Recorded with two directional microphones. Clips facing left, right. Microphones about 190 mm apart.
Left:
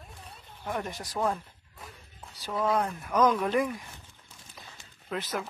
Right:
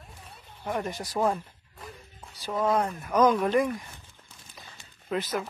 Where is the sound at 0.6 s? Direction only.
Centre (ahead or behind).